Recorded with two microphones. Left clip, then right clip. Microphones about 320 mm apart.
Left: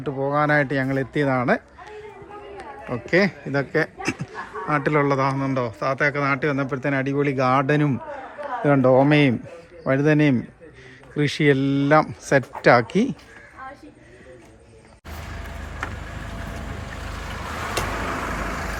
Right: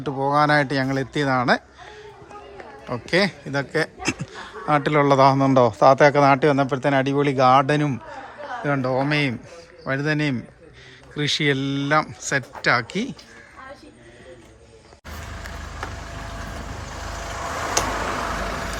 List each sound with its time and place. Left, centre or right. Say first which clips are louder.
0.0 s a man's voice: right 2 dB; centre
2.9 s a man's voice: left 1 dB; centre
17.3 s a sound: right 3 dB; right